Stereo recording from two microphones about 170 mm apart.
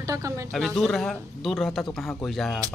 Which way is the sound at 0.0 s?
20° right (ahead or behind).